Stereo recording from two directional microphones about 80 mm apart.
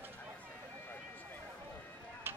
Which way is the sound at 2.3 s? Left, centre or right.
Right.